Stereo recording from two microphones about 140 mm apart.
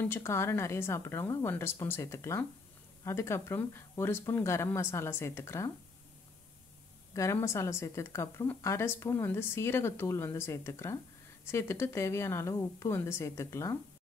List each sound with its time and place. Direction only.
0.0 s a woman's voice: 20° left (ahead or behind)
7.2 s a woman's voice: 20° left (ahead or behind)